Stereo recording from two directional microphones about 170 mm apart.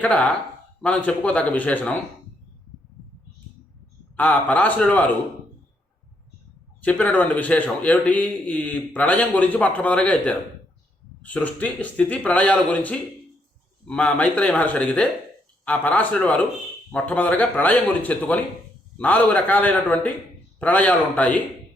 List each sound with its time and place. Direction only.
0.0 s a man's voice: 10° left (ahead or behind)
4.2 s a man's voice: 10° left (ahead or behind)
6.8 s a man's voice: 10° left (ahead or behind)